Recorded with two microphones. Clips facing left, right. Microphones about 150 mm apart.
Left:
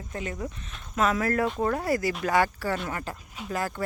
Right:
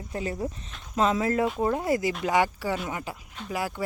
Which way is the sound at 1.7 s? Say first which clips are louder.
Right 1 dB; 20° right (ahead or behind).